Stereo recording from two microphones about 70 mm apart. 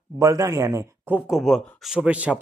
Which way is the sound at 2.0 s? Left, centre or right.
Centre.